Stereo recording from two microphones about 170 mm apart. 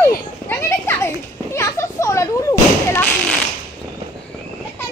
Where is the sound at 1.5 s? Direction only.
15° left (ahead or behind).